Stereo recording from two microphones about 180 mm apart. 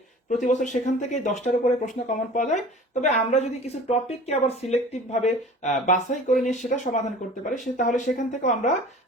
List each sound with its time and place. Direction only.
0.3 s speech: 45° left (ahead or behind)